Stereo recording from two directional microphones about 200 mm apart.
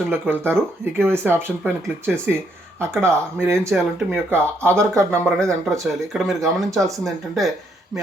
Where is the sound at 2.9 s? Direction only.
10° right (ahead or behind).